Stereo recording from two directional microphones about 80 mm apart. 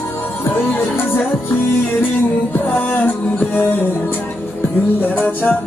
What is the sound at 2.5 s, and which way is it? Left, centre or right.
Music, left.